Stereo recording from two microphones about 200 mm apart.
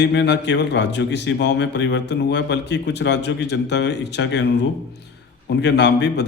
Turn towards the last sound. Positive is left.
turn(degrees=60)  # may be behind; listen again after turning